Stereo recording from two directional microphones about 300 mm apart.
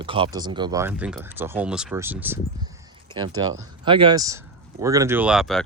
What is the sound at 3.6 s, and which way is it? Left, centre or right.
Speech, centre.